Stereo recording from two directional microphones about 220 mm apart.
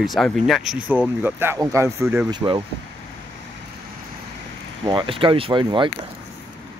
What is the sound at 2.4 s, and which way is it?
Speech, 20° right (ahead or behind).